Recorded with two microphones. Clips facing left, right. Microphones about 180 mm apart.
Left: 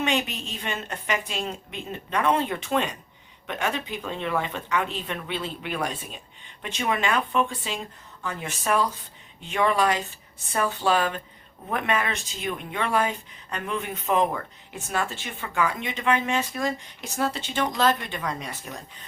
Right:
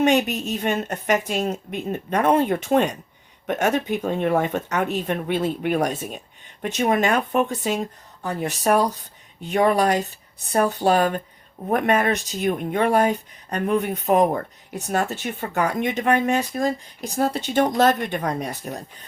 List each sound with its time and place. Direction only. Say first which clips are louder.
0.0 s speech: right 8 dB; 45° right (ahead or behind)